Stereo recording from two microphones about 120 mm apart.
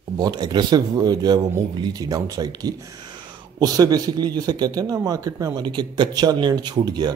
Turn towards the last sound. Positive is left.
turn(degrees=-35)  # may be behind; listen again after turning